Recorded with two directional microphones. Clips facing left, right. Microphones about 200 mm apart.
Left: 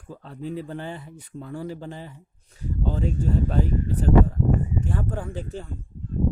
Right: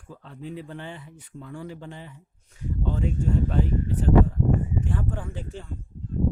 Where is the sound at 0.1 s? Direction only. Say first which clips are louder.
Left 4 dB; 40° left (ahead or behind).